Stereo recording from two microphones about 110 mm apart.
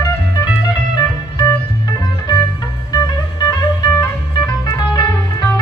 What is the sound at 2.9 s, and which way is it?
Music, 35° left (ahead or behind).